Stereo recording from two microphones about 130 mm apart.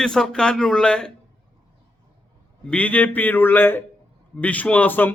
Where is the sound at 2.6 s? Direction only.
10° left (ahead or behind).